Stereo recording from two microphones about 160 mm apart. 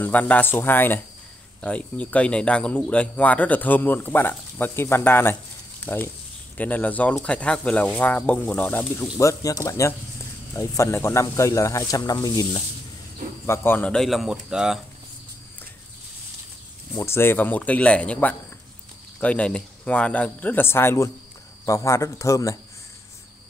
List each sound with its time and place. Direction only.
0.0 s speech: 10° left (ahead or behind)
9.0 s speech: 20° left (ahead or behind)
13.5 s speech: 15° left (ahead or behind); by 14.8 s 5° right (ahead or behind)
16.9 s speech: 15° left (ahead or behind)